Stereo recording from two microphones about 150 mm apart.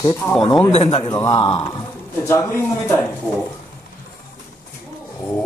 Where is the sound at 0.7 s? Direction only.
40° left (ahead or behind).